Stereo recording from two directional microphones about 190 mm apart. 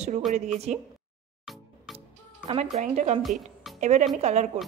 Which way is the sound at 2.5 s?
35° right (ahead or behind).